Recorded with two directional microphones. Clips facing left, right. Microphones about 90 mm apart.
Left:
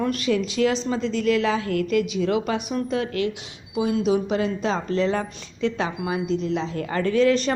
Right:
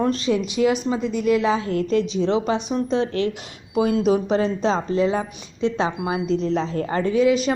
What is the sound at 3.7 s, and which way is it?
Speech, 45° right (ahead or behind).